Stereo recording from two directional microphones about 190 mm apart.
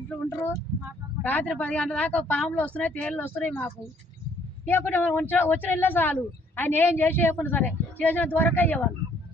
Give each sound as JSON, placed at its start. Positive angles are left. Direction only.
{"t": 0.3, "sound": "speech", "side_deg": 15}